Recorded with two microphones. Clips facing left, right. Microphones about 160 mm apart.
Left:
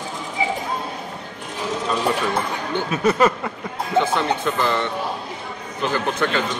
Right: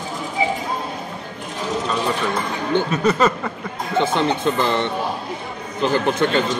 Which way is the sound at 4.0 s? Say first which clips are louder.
Right 2 dB; 25° right (ahead or behind).